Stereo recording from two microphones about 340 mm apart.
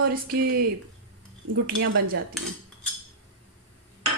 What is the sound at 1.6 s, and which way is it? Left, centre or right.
Speech, right.